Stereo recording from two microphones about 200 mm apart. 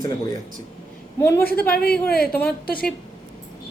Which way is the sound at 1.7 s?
50° left (ahead or behind).